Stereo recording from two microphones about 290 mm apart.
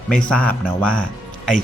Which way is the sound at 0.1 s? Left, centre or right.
Centre.